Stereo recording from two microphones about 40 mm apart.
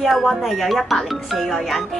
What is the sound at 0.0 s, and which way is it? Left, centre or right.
Speech, centre.